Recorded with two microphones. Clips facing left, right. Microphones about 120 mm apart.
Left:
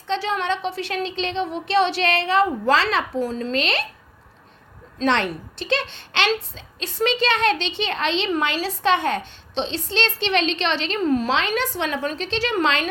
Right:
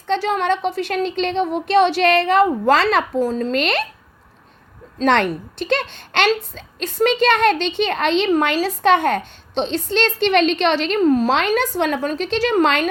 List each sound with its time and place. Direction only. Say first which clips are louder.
0.1 s a woman's voice: right 5 dB; 45° right (ahead or behind)
4.9 s a woman's voice: right 4 dB; 50° right (ahead or behind)